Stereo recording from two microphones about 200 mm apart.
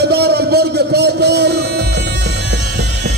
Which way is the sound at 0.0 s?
55° right (ahead or behind).